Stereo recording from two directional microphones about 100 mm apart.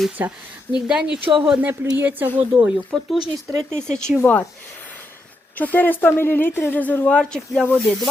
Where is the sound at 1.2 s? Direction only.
60° right (ahead or behind).